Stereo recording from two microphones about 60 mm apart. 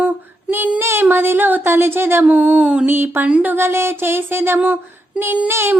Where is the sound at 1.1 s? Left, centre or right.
Right.